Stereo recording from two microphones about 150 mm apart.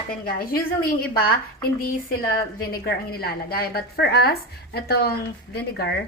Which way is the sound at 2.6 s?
90° left.